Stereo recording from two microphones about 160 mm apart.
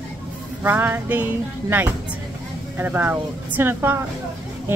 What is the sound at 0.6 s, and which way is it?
A woman's voice, 15° right (ahead or behind).